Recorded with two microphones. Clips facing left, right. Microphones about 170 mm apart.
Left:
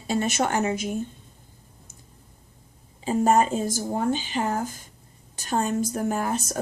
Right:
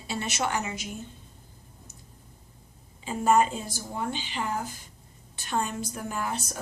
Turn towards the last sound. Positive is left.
turn(degrees=45)  # may be behind; listen again after turning